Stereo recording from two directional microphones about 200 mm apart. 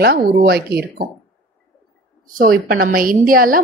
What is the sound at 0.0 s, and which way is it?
A woman's voice, 50° right (ahead or behind).